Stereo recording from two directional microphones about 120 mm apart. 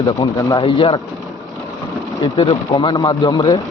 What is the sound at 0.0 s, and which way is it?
Speech, 35° left (ahead or behind).